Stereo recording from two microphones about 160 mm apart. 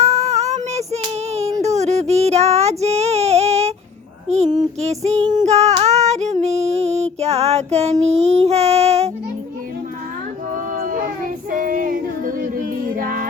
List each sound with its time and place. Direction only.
0.0 s child singing: 40° right (ahead or behind)
1.3 s a sound: 45° right (ahead or behind)
1.6 s child singing: 45° right (ahead or behind)
4.4 s child singing: 25° right (ahead or behind)
4.8 s female singing: 45° right (ahead or behind)
6.7 s child singing: 40° right (ahead or behind)
10.5 s child singing: 55° right (ahead or behind)